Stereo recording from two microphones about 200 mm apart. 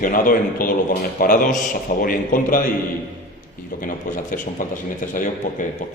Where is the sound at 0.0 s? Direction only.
45° left (ahead or behind).